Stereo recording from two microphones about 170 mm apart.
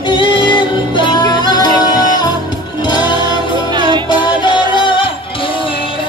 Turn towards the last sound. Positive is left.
turn(degrees=30)  # may be behind; listen again after turning